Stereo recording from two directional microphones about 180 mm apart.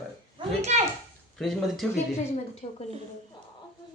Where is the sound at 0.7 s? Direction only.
40° right (ahead or behind).